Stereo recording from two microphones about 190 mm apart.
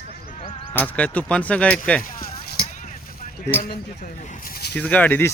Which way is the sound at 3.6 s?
45° left (ahead or behind).